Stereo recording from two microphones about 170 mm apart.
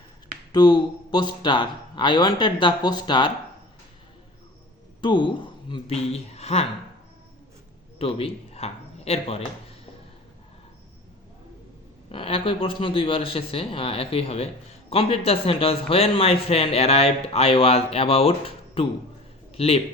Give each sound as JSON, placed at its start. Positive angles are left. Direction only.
{"t": 0.5, "sound": "a man's voice", "side_deg": 25}
{"t": 4.9, "sound": "a man's voice", "side_deg": 25}
{"t": 7.9, "sound": "a man's voice", "side_deg": 35}
{"t": 12.0, "sound": "a man's voice", "side_deg": 35}